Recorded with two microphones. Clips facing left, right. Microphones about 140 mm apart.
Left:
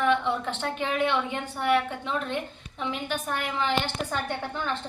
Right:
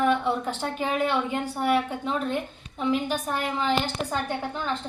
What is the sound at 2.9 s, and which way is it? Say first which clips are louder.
Speech: right 5 dB; 35° right (ahead or behind).